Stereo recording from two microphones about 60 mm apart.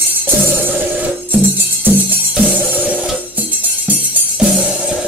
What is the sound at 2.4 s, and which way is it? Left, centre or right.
Music, right.